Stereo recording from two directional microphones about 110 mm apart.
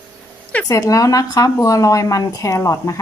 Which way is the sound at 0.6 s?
30° left (ahead or behind).